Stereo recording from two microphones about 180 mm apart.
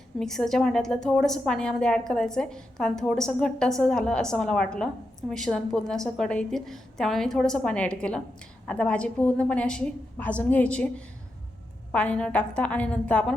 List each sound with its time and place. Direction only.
0.2 s a woman's voice: centre (ahead or behind)